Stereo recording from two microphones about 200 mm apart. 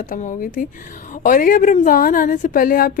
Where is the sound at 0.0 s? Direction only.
40° left (ahead or behind).